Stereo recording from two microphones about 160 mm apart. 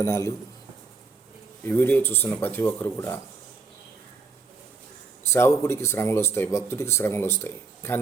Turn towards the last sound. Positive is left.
turn(degrees=15)  # may be behind; listen again after turning